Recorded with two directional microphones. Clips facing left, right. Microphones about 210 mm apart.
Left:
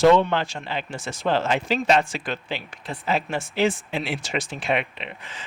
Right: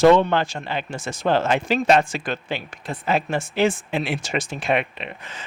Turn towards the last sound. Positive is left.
turn(degrees=-45)  # may be behind; listen again after turning